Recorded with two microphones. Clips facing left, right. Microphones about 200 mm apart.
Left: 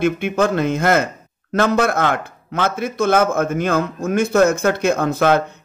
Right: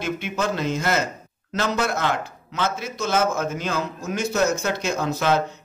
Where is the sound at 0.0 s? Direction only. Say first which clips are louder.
Left 8 dB; 55° left (ahead or behind).